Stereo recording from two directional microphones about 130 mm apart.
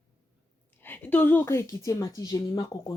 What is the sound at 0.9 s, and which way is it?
A woman's voice, 15° left (ahead or behind).